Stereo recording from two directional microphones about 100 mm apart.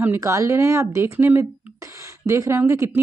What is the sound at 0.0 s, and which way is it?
Speech, 25° right (ahead or behind).